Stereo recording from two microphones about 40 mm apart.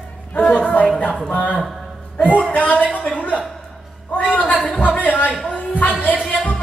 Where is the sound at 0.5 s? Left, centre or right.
Left.